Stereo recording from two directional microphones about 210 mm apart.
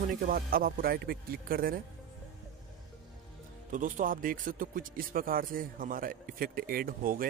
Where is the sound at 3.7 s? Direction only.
40° right (ahead or behind).